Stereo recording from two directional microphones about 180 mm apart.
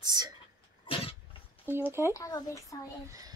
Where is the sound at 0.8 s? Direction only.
30° left (ahead or behind).